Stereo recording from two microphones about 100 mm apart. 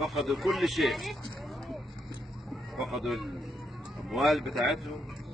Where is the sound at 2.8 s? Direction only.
Centre (ahead or behind).